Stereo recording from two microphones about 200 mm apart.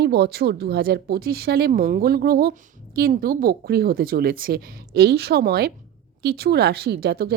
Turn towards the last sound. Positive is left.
turn(degrees=-50)  # may be behind; listen again after turning